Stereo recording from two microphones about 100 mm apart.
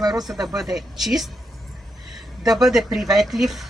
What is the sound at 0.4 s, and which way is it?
Speech, 5° right (ahead or behind).